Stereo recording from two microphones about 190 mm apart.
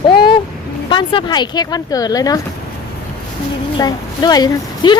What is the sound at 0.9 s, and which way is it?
A woman's voice, 25° left (ahead or behind).